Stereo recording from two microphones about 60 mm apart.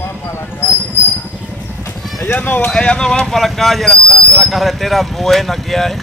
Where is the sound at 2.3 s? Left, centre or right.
Left.